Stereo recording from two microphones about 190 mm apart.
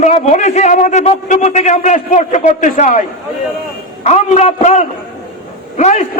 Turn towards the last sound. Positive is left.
turn(degrees=40)  # may be behind; listen again after turning